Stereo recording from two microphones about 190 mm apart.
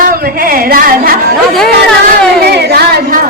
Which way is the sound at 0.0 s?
50° right (ahead or behind).